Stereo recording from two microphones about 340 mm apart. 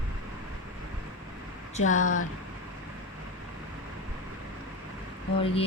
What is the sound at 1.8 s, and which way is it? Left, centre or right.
Speech, left.